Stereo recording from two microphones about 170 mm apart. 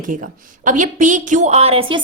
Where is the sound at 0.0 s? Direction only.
50° right (ahead or behind).